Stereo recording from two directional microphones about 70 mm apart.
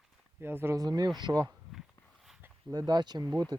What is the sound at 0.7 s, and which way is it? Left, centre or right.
Speech, right.